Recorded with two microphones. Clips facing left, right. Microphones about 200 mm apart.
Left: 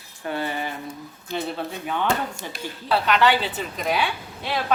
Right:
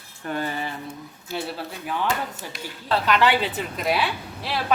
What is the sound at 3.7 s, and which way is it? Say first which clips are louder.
Speech: even; 5° right (ahead or behind).